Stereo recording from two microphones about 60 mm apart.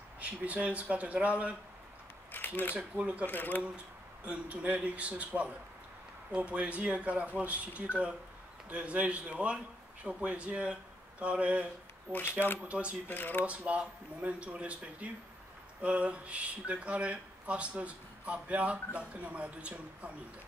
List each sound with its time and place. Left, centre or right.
0.2 s speech: right
2.3 s a sound: left
3.0 s speech: right
3.3 s speech: left
4.2 s speech: right
12.1 s speech: left
12.6 s speech: right
13.1 s speech: left
13.5 s speech: right